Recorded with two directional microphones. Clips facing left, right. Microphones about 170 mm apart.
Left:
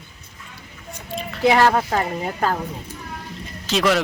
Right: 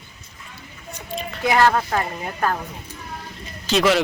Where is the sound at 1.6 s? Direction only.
20° left (ahead or behind).